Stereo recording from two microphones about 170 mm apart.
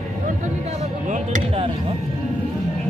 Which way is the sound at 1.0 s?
45° right (ahead or behind).